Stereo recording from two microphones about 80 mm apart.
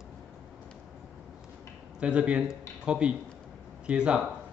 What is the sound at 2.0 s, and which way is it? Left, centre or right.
Speech, centre.